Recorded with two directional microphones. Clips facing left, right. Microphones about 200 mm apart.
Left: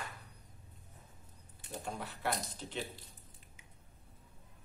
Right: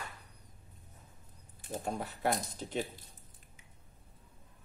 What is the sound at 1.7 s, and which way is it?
Speech, 45° right (ahead or behind).